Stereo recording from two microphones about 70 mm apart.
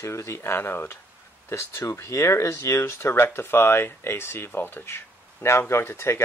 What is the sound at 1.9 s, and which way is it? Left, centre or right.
Speech, left.